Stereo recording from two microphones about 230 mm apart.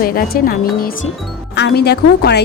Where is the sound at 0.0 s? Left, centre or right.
Left.